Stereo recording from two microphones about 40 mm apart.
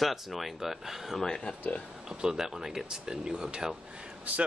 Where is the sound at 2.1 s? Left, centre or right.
Centre.